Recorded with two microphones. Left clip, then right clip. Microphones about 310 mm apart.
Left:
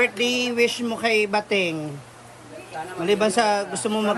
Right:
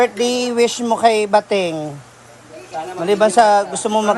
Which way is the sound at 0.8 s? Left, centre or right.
Centre.